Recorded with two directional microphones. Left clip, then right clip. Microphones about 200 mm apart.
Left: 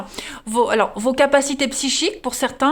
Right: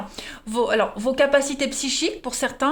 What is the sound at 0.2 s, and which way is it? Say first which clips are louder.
Speech: left 5 dB; 35° left (ahead or behind).